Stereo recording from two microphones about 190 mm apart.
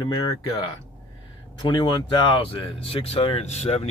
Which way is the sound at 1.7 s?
25° left (ahead or behind).